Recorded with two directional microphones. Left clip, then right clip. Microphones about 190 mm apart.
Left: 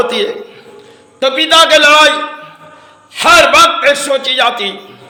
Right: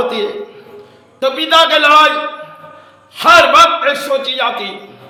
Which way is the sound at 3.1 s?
20° left (ahead or behind).